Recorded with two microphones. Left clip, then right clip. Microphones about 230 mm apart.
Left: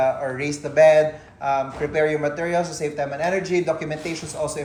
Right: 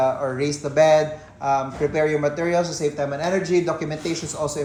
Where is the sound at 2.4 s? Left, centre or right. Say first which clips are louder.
Right 1 dB; right.